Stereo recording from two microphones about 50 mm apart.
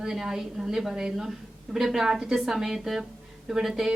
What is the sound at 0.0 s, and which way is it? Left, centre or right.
A woman's voice, centre.